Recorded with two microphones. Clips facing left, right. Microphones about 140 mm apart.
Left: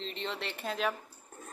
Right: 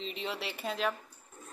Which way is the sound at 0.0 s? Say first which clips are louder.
Even; 5° right (ahead or behind).